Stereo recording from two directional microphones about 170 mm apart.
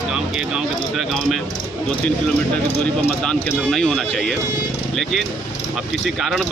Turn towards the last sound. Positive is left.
turn(degrees=0)  # may be behind; listen again after turning